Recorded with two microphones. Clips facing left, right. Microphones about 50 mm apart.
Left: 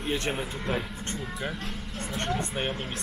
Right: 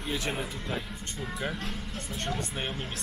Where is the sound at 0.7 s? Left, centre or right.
Left.